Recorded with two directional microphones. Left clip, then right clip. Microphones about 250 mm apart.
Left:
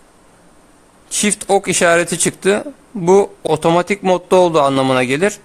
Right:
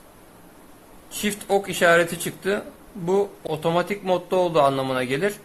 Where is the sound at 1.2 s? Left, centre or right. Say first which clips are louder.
Left 8 dB; left.